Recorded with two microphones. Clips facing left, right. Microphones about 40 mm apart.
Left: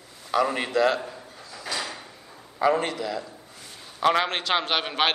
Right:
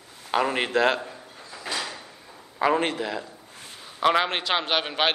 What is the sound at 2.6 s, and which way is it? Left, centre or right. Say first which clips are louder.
Speech: even; right.